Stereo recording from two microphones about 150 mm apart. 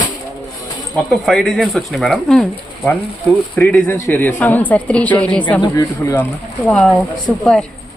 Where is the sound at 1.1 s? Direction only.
Centre (ahead or behind).